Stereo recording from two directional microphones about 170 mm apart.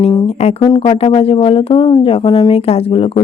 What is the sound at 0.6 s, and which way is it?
Speech, 30° left (ahead or behind).